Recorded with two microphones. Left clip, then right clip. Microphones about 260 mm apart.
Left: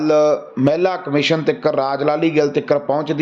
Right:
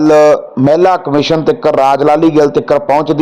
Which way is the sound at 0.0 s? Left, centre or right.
Centre.